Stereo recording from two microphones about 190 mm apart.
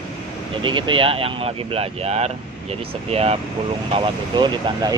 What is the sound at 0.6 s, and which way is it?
Speech, 25° right (ahead or behind).